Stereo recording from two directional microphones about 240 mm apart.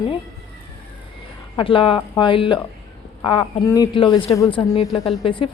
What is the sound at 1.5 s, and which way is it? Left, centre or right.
Speech, left.